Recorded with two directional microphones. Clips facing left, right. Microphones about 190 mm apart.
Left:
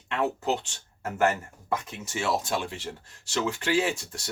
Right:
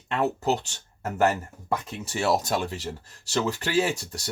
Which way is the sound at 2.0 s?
35° right (ahead or behind).